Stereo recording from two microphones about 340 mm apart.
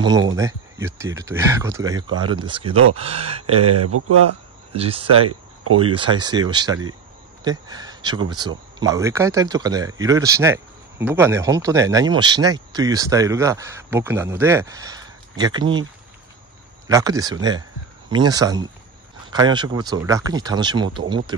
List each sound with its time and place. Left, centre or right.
0.0 s speech: centre
3.4 s speech: right
4.7 s speech: centre
5.6 s speech: right
5.9 s speech: centre
16.8 s speech: centre